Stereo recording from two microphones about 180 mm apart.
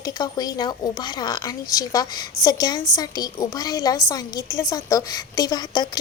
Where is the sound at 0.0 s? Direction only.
20° left (ahead or behind).